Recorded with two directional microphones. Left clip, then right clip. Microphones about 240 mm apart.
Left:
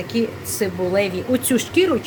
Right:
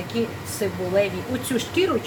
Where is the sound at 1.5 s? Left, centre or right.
Left.